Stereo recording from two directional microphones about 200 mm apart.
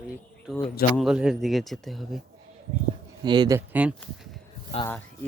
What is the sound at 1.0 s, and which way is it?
Speech, 5° right (ahead or behind).